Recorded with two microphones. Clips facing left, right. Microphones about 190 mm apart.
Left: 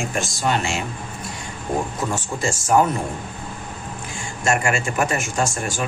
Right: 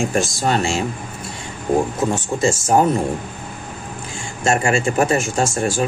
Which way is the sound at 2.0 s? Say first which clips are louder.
Right 6 dB; 25° right (ahead or behind).